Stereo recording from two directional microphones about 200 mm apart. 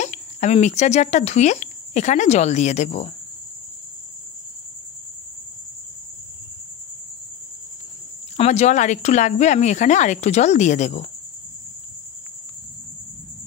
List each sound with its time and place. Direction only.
0.0 s speech: 35° left (ahead or behind)
8.4 s speech: 35° left (ahead or behind)